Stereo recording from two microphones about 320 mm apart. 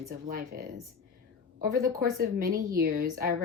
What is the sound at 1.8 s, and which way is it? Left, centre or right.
Speech, centre.